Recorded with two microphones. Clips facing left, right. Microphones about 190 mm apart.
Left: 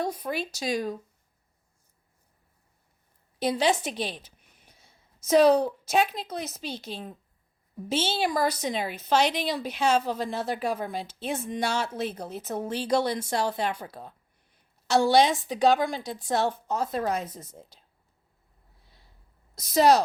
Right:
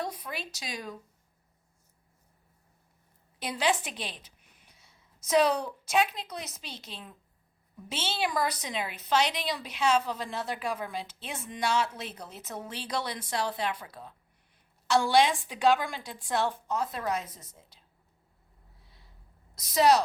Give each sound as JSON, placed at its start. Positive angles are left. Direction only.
{"t": 0.0, "sound": "a woman's voice", "side_deg": 45}
{"t": 3.4, "sound": "speech", "side_deg": 35}
{"t": 4.8, "sound": "a sound", "side_deg": 50}
{"t": 5.9, "sound": "a woman's voice", "side_deg": 45}
{"t": 15.1, "sound": "speech", "side_deg": 40}
{"t": 19.5, "sound": "a woman's voice", "side_deg": 45}